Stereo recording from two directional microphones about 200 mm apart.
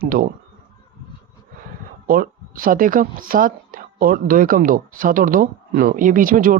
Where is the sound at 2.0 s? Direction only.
45° right (ahead or behind).